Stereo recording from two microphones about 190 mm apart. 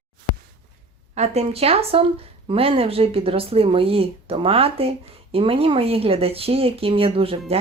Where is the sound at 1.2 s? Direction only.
35° right (ahead or behind).